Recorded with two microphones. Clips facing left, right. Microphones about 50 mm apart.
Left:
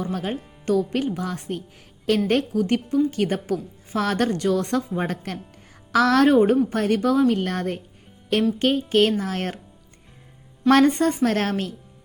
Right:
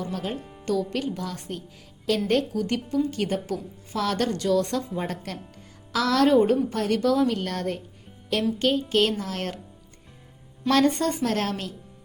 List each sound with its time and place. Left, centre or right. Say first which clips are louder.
0.1 s a woman's voice: left 3 dB; left
7.0 s a woman's voice: left 2 dB; centre
7.3 s a woman's voice: left 3 dB; left
10.7 s speech: left 5 dB; left